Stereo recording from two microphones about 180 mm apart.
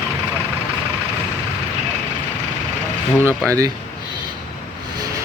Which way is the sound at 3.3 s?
15° right (ahead or behind).